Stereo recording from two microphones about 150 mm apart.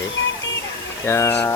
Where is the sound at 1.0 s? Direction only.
15° left (ahead or behind).